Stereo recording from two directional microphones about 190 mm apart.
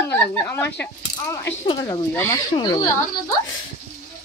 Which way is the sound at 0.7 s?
15° left (ahead or behind).